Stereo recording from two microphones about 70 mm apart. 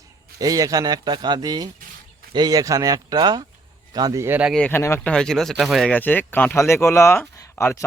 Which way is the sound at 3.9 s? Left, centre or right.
Right.